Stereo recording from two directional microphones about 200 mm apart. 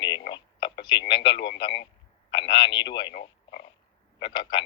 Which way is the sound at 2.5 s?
25° left (ahead or behind).